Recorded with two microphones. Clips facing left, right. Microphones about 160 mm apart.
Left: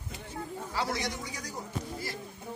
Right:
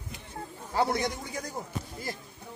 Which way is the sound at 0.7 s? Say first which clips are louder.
Right 6 dB; 55° right (ahead or behind).